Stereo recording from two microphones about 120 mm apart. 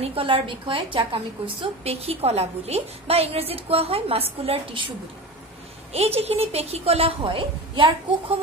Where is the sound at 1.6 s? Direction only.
55° right (ahead or behind).